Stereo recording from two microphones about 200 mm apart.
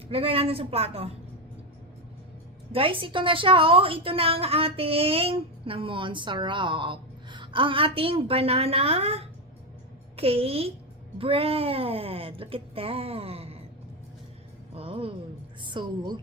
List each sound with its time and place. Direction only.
0.1 s a woman's voice: 30° right (ahead or behind)
2.7 s a woman's voice: 25° right (ahead or behind)
14.8 s a woman's voice: 25° right (ahead or behind)